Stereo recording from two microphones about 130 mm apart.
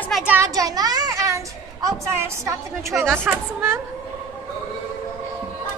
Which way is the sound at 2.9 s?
Centre (ahead or behind).